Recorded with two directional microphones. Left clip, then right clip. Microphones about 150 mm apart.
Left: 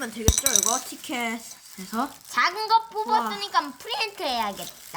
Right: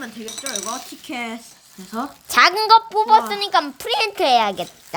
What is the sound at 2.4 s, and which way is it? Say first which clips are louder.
Speech: right 8 dB; 85° right.